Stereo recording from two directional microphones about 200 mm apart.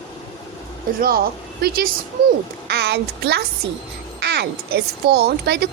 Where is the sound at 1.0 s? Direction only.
50° right (ahead or behind).